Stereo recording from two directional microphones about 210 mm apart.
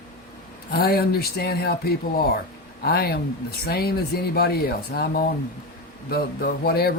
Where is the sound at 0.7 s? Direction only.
45° left (ahead or behind).